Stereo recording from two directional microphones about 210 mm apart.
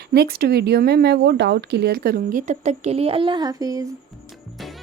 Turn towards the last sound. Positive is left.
turn(degrees=-15)  # may be behind; listen again after turning